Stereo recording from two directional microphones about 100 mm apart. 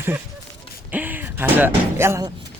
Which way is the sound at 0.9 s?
15° right (ahead or behind).